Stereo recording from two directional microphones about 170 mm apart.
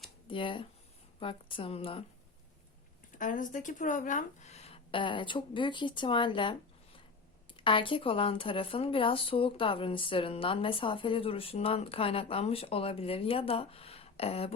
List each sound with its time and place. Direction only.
0.3 s a woman's voice: 30° left (ahead or behind)
3.2 s a woman's voice: 50° left (ahead or behind); by 6.6 s 30° left (ahead or behind)
7.6 s a woman's voice: 30° left (ahead or behind)